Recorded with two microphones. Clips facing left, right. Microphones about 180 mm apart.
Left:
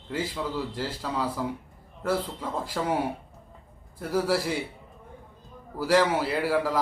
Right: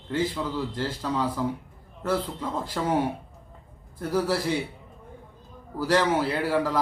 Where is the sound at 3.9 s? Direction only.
10° left (ahead or behind).